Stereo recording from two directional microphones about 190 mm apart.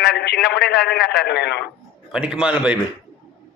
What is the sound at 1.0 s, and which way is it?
Speech, 60° left (ahead or behind).